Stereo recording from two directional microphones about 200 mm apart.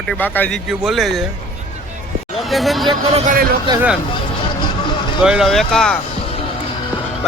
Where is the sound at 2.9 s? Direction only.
35° right (ahead or behind).